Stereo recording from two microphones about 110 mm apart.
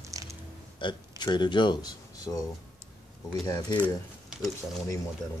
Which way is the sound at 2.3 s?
35° left (ahead or behind).